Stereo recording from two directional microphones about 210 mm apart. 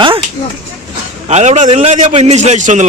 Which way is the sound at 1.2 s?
30° right (ahead or behind).